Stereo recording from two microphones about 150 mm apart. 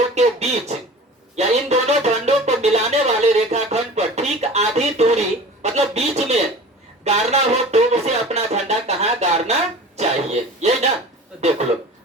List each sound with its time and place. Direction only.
0.0 s speech: 45° right (ahead or behind)
1.4 s a sound: 45° right (ahead or behind)
5.6 s speech: 45° right (ahead or behind)